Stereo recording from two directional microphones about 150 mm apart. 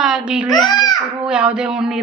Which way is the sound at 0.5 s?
25° left (ahead or behind).